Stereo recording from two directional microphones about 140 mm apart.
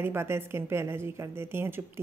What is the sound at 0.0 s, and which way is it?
A woman's voice, 20° right (ahead or behind).